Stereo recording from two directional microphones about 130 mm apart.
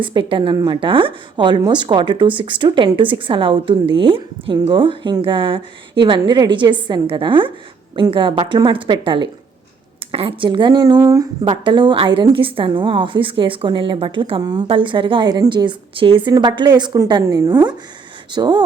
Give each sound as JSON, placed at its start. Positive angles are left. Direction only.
{"t": 0.0, "sound": "a woman's voice", "side_deg": -40}
{"t": 18.3, "sound": "speech", "side_deg": -35}